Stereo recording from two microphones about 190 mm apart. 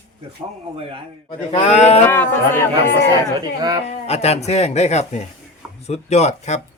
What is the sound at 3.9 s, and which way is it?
Speech, 35° left (ahead or behind).